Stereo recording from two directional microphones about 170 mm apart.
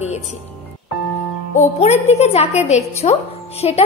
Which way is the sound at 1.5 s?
45° left (ahead or behind).